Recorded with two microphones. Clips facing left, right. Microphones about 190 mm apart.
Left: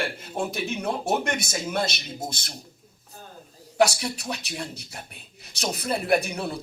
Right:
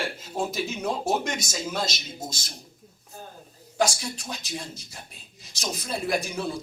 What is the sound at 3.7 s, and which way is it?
Speech, 65° left (ahead or behind).